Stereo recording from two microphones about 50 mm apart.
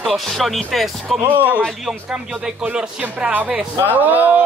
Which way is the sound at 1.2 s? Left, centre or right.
Right.